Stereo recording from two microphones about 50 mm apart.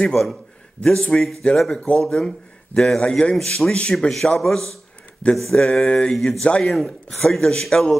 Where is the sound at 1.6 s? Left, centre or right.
Centre.